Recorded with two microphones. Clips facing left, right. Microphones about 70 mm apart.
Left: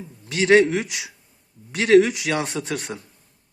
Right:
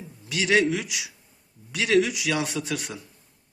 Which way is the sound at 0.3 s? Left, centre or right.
Left.